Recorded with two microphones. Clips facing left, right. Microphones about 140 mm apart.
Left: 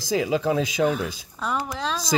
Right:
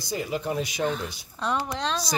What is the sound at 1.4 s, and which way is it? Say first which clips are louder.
Speech: even; 5° left (ahead or behind).